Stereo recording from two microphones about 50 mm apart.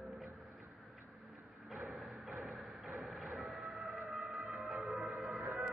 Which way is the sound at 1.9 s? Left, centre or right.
Centre.